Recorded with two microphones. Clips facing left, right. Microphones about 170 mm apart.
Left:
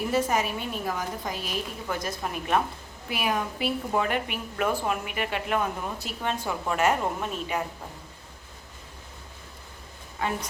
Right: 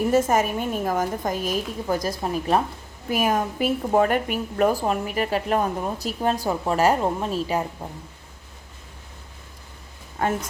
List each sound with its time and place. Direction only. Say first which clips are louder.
0.1 s a woman's voice: right 4 dB; 45° right (ahead or behind)
10.2 s a woman's voice: right 5 dB; 50° right (ahead or behind)